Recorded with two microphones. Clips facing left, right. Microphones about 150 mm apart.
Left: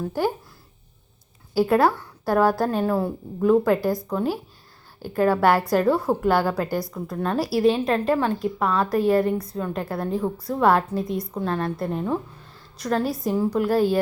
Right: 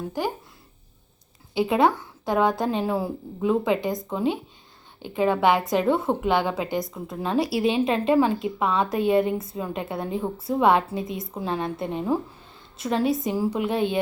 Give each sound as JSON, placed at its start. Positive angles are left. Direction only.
{"t": 1.6, "sound": "a woman's voice", "side_deg": 0}
{"t": 5.3, "sound": "a woman's voice", "side_deg": -20}
{"t": 5.6, "sound": "a woman's voice", "side_deg": 0}
{"t": 6.1, "sound": "a woman's voice", "side_deg": -20}
{"t": 6.4, "sound": "a woman's voice", "side_deg": 0}